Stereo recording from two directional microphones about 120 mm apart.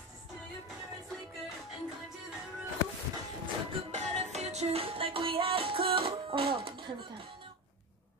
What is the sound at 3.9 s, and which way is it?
Music, 70° right (ahead or behind).